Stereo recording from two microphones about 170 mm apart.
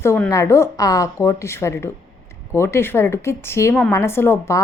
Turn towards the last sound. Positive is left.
turn(degrees=15)  # may be behind; listen again after turning